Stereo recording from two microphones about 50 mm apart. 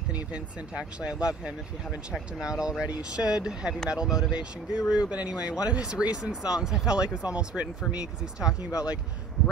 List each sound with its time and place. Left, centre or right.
0.1 s speech: right